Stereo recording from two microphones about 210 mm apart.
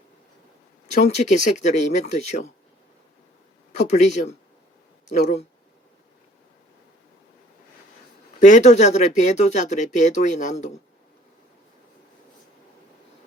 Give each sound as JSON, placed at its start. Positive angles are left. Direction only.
{"t": 0.9, "sound": "speech", "side_deg": 35}
{"t": 3.7, "sound": "speech", "side_deg": 35}
{"t": 8.4, "sound": "speech", "side_deg": 35}